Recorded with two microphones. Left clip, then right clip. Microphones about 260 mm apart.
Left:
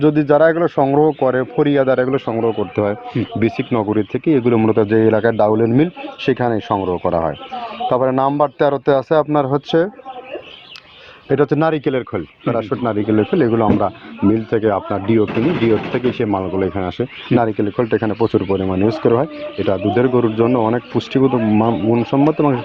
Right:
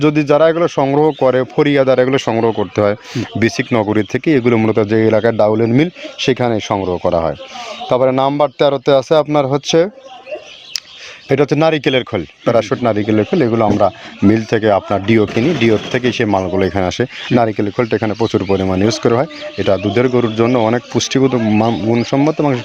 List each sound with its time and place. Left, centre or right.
0.0 s speech: right
11.3 s speech: right